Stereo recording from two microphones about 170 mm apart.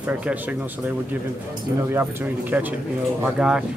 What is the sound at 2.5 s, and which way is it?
Speech, 10° right (ahead or behind).